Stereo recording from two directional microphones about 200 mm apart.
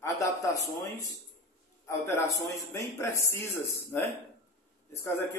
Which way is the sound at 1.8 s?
15° left (ahead or behind).